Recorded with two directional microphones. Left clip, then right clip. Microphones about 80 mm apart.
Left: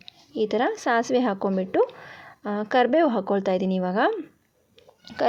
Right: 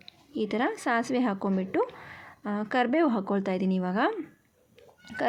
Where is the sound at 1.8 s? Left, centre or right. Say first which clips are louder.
Left 8 dB; left.